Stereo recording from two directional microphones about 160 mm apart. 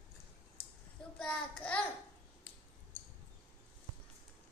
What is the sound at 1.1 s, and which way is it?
Child singing, 5° left (ahead or behind).